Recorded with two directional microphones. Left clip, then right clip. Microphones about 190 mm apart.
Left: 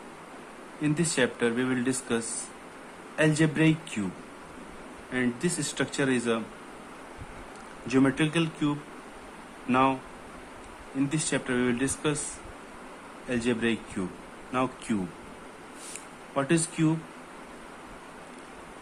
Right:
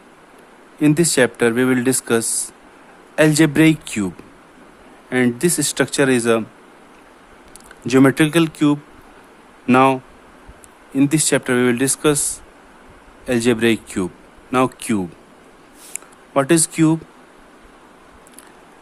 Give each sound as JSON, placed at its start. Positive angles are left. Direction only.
{"t": 0.8, "sound": "speech", "side_deg": -65}
{"t": 5.1, "sound": "speech", "side_deg": -65}
{"t": 7.9, "sound": "speech", "side_deg": -60}
{"t": 11.1, "sound": "speech", "side_deg": -65}
{"t": 13.2, "sound": "speech", "side_deg": -65}
{"t": 16.3, "sound": "speech", "side_deg": -65}